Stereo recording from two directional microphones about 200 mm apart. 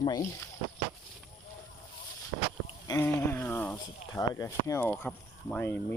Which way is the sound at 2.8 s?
15° left (ahead or behind).